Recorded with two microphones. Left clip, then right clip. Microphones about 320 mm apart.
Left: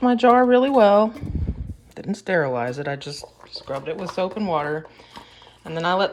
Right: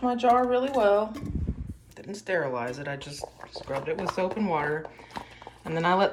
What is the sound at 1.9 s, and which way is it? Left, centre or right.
Speech, centre.